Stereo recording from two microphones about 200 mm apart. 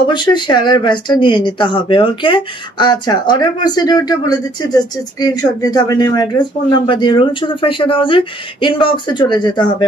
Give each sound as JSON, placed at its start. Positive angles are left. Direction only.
{"t": 0.1, "sound": "speech", "side_deg": 20}